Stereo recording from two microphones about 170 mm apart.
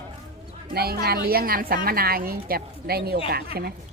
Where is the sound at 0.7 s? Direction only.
65° right (ahead or behind).